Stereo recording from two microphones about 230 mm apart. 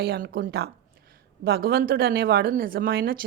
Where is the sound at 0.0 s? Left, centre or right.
Right.